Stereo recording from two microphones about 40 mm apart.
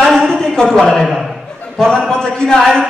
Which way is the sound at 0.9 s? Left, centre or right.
Centre.